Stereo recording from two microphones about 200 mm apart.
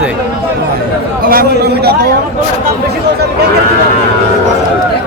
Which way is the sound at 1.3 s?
50° right (ahead or behind).